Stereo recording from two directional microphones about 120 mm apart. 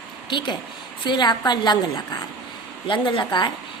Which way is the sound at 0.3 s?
40° left (ahead or behind).